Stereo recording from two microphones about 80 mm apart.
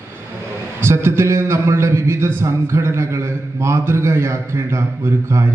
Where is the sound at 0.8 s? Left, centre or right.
Right.